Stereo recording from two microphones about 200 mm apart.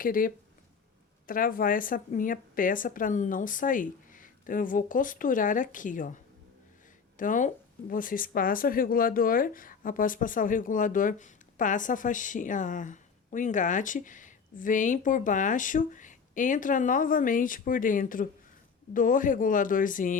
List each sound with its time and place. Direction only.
0.0 s a woman's voice: 45° left (ahead or behind)
7.2 s speech: 40° left (ahead or behind)